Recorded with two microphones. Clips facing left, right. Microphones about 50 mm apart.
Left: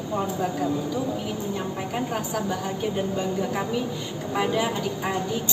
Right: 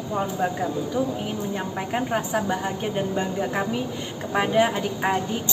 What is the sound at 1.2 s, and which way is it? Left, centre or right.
Speech, right.